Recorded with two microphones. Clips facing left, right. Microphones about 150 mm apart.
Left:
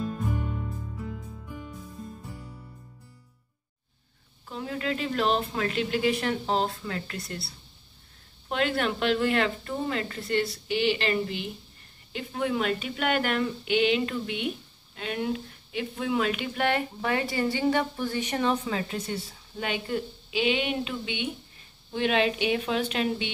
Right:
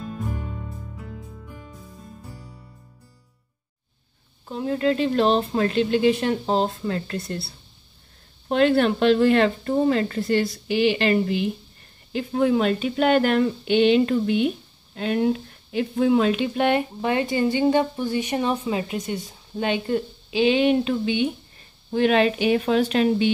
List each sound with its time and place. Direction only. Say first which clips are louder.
4.5 s speech: right 9 dB; 30° right (ahead or behind)
12.1 s speech: right 8 dB; 35° right (ahead or behind); by 19.3 s 15° right (ahead or behind)
19.6 s speech: right 7 dB; 30° right (ahead or behind)